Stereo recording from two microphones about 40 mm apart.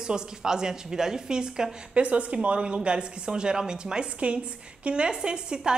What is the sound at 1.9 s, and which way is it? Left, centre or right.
A woman's voice, right.